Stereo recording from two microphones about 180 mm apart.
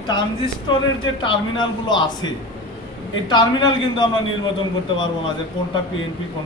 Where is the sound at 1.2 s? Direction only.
25° left (ahead or behind).